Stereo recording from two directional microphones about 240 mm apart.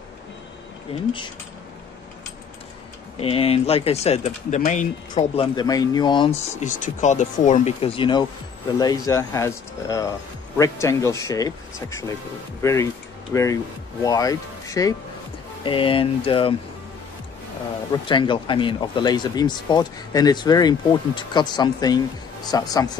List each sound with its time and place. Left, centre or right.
0.9 s speech: left
3.2 s speech: left
5.1 s speech: left
6.6 s speech: left
18.0 s speech: centre